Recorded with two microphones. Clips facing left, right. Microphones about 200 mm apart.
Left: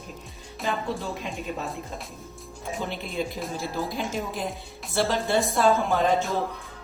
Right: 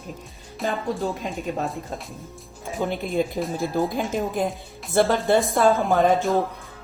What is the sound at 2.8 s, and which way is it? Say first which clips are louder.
A woman's voice: right 8 dB; 50° right (ahead or behind).